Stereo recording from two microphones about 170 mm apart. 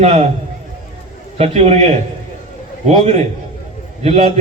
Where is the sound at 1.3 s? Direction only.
35° right (ahead or behind).